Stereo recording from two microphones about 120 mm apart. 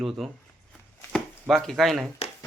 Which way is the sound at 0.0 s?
Centre (ahead or behind).